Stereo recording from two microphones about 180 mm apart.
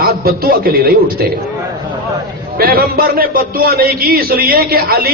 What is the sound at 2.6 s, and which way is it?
A man's voice, 55° right (ahead or behind).